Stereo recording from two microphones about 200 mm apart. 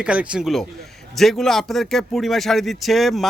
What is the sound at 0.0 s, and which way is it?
A man's voice, 5° right (ahead or behind).